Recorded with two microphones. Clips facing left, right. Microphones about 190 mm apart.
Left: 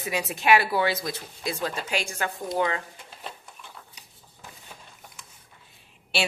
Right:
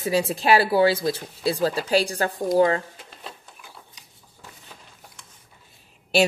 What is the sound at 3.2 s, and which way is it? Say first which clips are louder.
Printer: left 1 dB; 5° right (ahead or behind).